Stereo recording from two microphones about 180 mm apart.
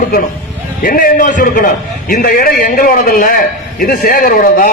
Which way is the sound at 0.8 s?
50° left (ahead or behind).